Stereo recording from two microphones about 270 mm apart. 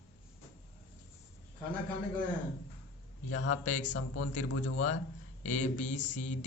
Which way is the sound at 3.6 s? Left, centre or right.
Left.